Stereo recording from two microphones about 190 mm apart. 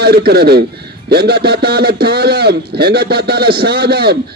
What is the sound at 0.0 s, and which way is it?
A man's voice, 55° right (ahead or behind).